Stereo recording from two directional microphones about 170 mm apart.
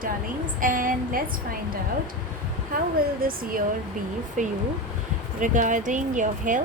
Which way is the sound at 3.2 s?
55° right (ahead or behind).